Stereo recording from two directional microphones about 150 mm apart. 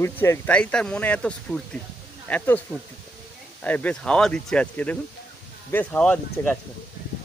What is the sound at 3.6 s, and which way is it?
Speech, 10° left (ahead or behind).